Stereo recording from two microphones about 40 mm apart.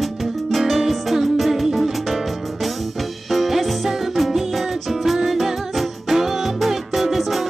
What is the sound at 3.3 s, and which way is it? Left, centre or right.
Music, centre.